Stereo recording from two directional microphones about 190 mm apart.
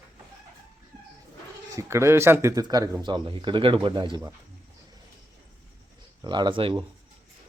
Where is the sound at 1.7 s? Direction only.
15° right (ahead or behind).